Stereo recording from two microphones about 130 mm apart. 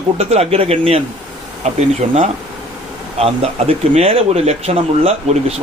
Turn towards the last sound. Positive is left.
turn(degrees=-50)  # may be behind; listen again after turning